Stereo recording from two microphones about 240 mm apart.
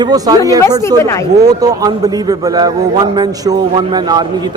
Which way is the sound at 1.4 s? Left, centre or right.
Centre.